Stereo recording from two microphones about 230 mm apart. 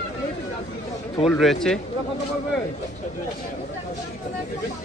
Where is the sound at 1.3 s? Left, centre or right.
Centre.